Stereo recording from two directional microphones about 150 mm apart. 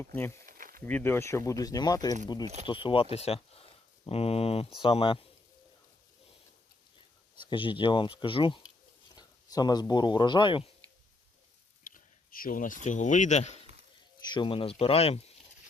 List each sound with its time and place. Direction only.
0.0 s speech: 15° left (ahead or behind)
0.4 s a sound: 70° right (ahead or behind)
0.9 s speech: 15° left (ahead or behind); by 5.2 s 40° left (ahead or behind)
7.5 s speech: 35° left (ahead or behind)
11.8 s speech: 65° left (ahead or behind)
14.3 s speech: 35° left (ahead or behind)